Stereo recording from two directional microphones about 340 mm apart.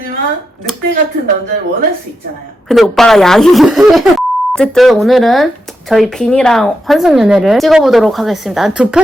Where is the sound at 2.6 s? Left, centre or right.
Centre.